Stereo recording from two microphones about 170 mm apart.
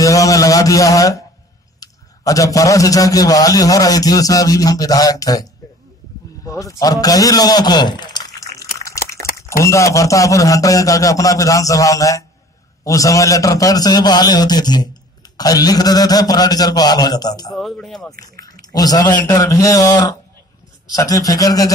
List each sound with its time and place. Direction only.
0.0 s a sound: 20° left (ahead or behind)
1.8 s a man's voice: 20° left (ahead or behind)
6.6 s speech: 20° left (ahead or behind)
8.7 s a sound: 20° left (ahead or behind)
9.6 s a man's voice: 15° left (ahead or behind)
17.6 s speech: centre (ahead or behind)
18.4 s a man's voice: 20° left (ahead or behind)